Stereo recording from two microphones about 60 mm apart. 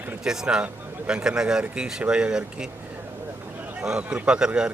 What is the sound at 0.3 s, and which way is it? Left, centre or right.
Speech, centre.